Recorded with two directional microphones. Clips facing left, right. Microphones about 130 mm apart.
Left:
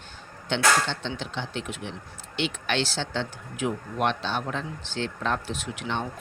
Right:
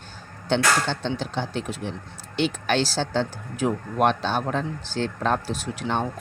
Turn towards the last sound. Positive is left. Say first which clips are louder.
# right 4 dB
turn(degrees=-40)  # may be behind; listen again after turning